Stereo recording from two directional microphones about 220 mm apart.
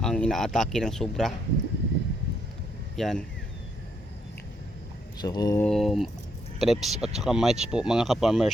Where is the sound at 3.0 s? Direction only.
Centre (ahead or behind).